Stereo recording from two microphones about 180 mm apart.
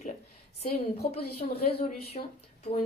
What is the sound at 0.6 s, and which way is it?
Speech, 35° left (ahead or behind).